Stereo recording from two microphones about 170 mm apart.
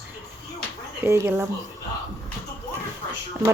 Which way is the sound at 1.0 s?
15° right (ahead or behind).